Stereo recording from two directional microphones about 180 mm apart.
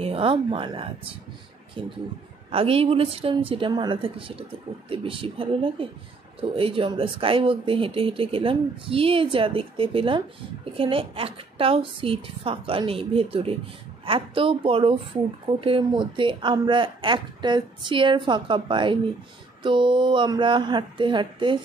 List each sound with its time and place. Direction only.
0.0 s speech: 30° right (ahead or behind)